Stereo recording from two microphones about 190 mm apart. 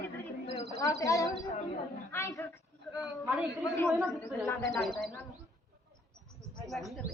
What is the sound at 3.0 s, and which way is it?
Speech, 5° right (ahead or behind).